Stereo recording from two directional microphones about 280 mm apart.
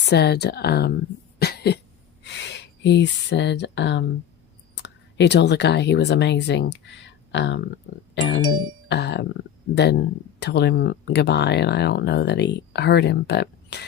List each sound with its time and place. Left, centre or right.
0.0 s speech: left
1.4 s cough: left
2.2 s speech: left
8.9 s music: left
9.7 s speech: left